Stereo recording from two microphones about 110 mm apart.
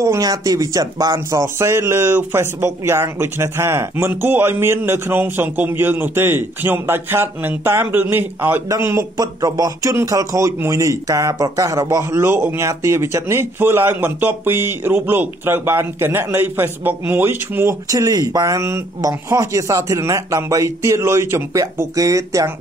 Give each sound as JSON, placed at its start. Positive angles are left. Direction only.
{"t": 0.0, "sound": "speech", "side_deg": -30}
{"t": 17.8, "sound": "speech", "side_deg": -35}